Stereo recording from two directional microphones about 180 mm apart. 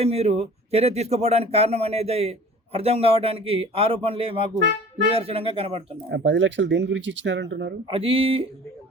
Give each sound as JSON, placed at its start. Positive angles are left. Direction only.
{"t": 0.0, "sound": "speech", "side_deg": -35}
{"t": 6.1, "sound": "speech", "side_deg": -80}
{"t": 7.9, "sound": "speech", "side_deg": -30}